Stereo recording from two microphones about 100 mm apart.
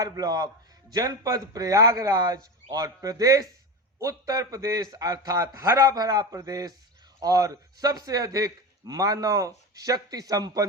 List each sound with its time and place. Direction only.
0.0 s a man's voice: 35° right (ahead or behind)